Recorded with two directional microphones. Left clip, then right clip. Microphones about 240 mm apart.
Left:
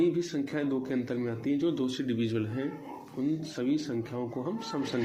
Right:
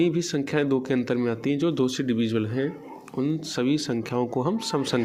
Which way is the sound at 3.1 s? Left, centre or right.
Right.